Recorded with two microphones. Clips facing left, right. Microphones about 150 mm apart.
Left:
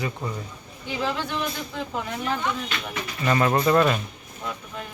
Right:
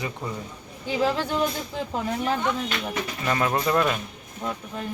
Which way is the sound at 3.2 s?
Centre (ahead or behind).